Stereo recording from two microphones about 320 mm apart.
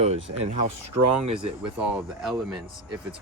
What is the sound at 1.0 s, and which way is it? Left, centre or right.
Speech, right.